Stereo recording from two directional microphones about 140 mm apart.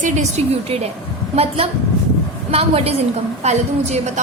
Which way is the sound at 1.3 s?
45° right (ahead or behind).